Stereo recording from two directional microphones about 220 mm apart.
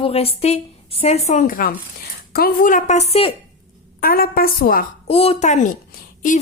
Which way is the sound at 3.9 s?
40° left (ahead or behind).